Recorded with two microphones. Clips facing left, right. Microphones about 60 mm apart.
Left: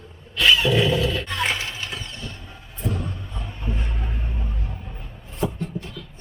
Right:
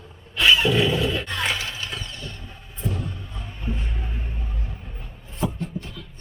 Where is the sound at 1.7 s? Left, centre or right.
Centre.